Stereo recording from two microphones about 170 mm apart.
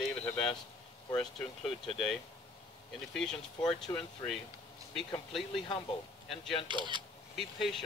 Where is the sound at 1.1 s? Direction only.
5° left (ahead or behind).